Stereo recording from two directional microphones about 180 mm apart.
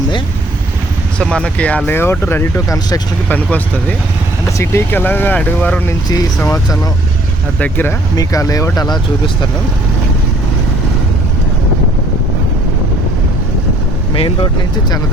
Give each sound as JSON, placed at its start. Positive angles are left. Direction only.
{"t": 1.2, "sound": "speech", "side_deg": 5}
{"t": 3.2, "sound": "speech", "side_deg": 10}
{"t": 6.1, "sound": "speech", "side_deg": 20}
{"t": 7.6, "sound": "speech", "side_deg": 10}